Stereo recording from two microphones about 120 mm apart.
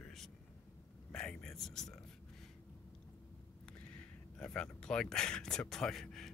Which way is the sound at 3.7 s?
10° left (ahead or behind).